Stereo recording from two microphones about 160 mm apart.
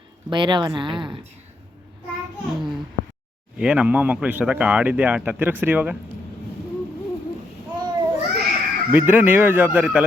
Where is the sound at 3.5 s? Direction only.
5° right (ahead or behind).